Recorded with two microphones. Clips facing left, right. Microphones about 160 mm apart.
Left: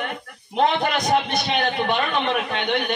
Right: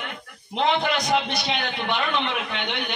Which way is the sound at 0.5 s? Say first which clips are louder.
Left 2 dB; 50° left (ahead or behind).